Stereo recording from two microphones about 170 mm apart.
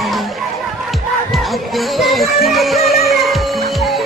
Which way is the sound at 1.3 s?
Centre (ahead or behind).